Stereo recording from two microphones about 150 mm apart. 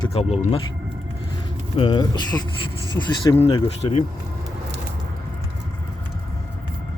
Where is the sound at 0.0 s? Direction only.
40° left (ahead or behind).